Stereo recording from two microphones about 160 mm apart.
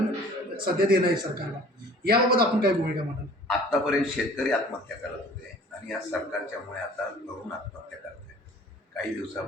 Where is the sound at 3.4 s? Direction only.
5° left (ahead or behind).